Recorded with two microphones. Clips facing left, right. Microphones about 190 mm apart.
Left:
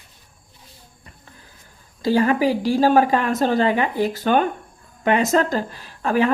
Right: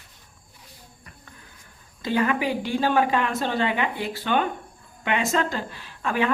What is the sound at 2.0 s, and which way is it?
Speech, 35° left (ahead or behind).